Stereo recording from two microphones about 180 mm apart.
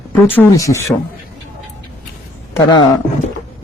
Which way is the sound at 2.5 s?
25° left (ahead or behind).